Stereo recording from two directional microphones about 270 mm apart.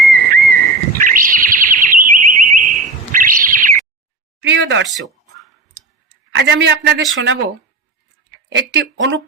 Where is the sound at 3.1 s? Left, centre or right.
Right.